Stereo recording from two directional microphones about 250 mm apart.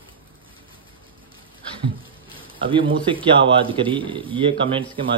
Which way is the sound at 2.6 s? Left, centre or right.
Centre.